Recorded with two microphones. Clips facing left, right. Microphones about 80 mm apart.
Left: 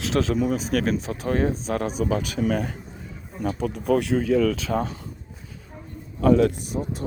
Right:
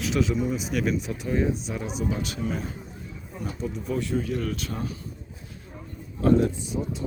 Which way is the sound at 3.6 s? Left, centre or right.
Left.